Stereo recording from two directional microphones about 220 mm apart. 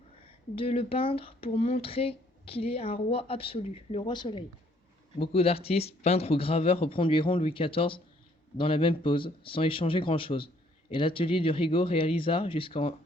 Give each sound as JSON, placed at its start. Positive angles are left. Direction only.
{"t": 0.5, "sound": "speech", "side_deg": 25}